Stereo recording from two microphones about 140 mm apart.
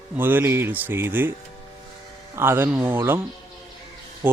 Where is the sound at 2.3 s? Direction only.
15° right (ahead or behind).